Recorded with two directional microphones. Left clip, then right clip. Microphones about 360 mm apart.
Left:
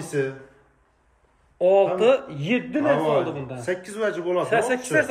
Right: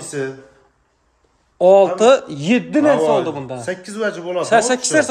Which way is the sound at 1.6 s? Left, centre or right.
Centre.